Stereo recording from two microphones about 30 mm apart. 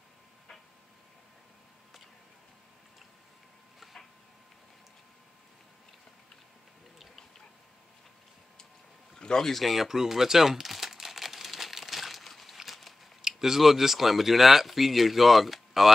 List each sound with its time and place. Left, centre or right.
9.1 s a sound: centre
9.5 s crumpling: centre
12.6 s biting: centre
13.4 s speech: centre